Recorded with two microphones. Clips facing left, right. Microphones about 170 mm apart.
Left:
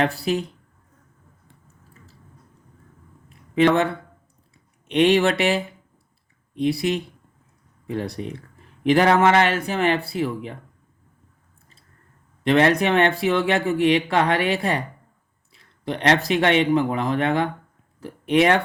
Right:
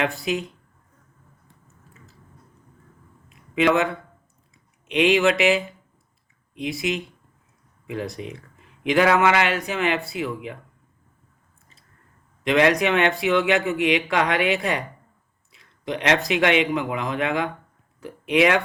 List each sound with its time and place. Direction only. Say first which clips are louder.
0.0 s speech: left 3 dB; 35° left (ahead or behind)
3.2 s a sound: left 4 dB; 35° left (ahead or behind)
4.9 s speech: left 1 dB; 35° left (ahead or behind)
6.7 s speech: left 4 dB; 35° left (ahead or behind)
12.5 s speech: left 1 dB; 35° left (ahead or behind)